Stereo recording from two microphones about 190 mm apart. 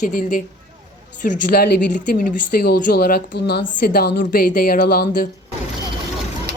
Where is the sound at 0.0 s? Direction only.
45° left (ahead or behind).